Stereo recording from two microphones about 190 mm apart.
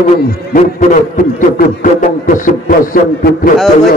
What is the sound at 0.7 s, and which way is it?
A man's voice, 45° left (ahead or behind).